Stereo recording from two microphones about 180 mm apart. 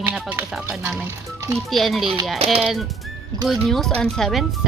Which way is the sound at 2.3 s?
35° right (ahead or behind).